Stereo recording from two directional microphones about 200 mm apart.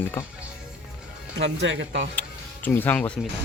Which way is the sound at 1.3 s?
65° right (ahead or behind).